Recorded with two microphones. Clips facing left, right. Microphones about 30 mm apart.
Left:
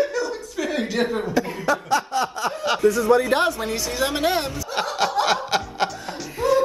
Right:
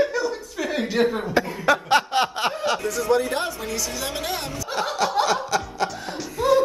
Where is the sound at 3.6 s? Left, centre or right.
Left.